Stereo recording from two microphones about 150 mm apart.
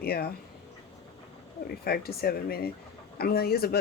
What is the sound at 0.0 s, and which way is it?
Speech, 90° left.